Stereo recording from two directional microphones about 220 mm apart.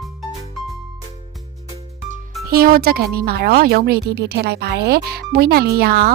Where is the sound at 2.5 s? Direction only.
40° right (ahead or behind).